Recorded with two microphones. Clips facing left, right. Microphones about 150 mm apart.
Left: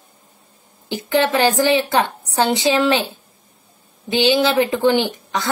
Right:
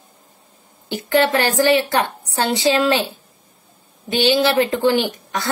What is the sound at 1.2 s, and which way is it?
A woman's voice, 15° left (ahead or behind).